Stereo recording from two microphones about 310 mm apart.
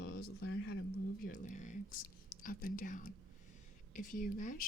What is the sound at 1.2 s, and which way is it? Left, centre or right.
Whispering, left.